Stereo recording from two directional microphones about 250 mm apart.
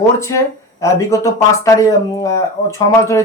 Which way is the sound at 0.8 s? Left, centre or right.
Centre.